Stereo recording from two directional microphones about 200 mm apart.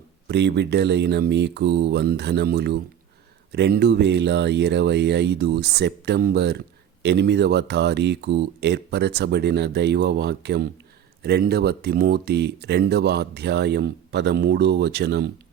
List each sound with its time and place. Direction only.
0.3 s speech: 60° right (ahead or behind)